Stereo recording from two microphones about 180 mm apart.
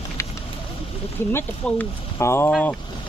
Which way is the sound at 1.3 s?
15° left (ahead or behind).